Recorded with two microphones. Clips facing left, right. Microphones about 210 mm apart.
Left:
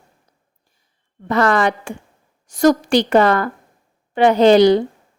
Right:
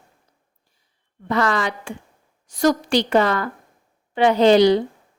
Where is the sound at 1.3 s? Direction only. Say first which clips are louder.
Left 5 dB; 55° left (ahead or behind).